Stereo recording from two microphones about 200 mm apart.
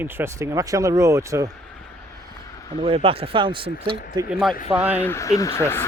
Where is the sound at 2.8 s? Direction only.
30° right (ahead or behind).